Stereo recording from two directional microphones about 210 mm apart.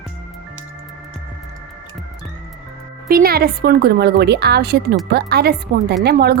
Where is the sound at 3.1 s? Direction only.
45° right (ahead or behind).